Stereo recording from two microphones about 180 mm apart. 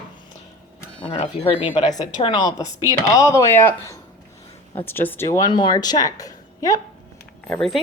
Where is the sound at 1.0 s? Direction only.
30° left (ahead or behind).